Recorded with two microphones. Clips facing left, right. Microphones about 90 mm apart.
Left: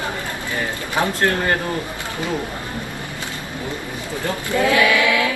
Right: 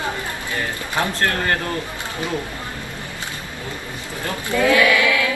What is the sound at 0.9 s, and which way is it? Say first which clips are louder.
Speech: left 2 dB; 15° left (ahead or behind).